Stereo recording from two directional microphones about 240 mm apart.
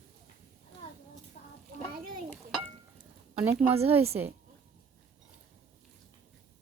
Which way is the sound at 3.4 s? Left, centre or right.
Right.